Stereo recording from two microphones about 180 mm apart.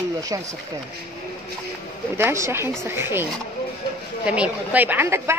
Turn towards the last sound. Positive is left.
turn(degrees=-15)  # may be behind; listen again after turning